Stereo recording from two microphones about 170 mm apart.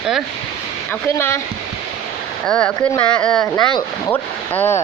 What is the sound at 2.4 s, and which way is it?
Speech, 5° left (ahead or behind).